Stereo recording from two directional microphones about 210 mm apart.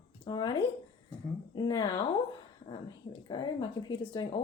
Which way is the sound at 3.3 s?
20° left (ahead or behind).